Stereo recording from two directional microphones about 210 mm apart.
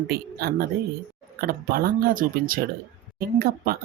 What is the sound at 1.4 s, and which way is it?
Speech, 45° right (ahead or behind).